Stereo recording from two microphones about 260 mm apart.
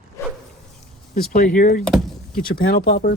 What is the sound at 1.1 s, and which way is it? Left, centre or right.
Speech, left.